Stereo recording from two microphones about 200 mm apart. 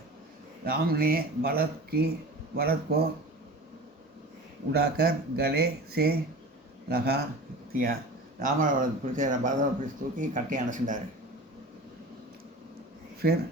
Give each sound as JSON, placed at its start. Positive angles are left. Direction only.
{"t": 0.6, "sound": "speech", "side_deg": -50}
{"t": 4.7, "sound": "speech", "side_deg": -50}